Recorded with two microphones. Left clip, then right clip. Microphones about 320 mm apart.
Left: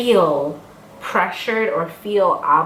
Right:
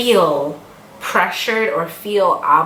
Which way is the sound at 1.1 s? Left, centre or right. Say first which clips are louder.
Right 3 dB; centre.